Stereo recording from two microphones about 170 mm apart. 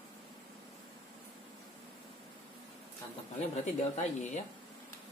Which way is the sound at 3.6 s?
45° left (ahead or behind).